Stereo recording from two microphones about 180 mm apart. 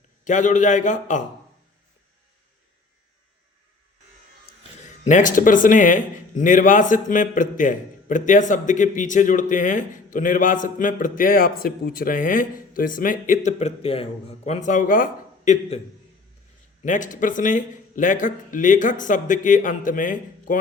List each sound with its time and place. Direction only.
0.3 s speech: 45° left (ahead or behind)
5.0 s speech: 45° left (ahead or behind)
16.8 s speech: 45° left (ahead or behind)